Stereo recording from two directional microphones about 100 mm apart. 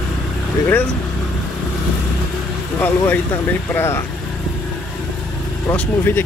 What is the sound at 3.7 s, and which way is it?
Speech, 25° left (ahead or behind).